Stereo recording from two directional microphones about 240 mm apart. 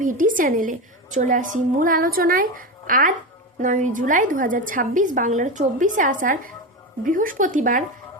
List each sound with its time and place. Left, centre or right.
0.0 s a woman's voice: right